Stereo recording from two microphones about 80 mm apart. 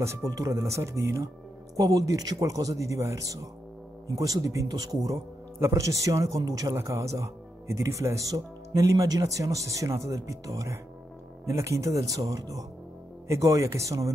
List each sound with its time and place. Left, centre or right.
0.0 s speech: right
5.6 s speech: right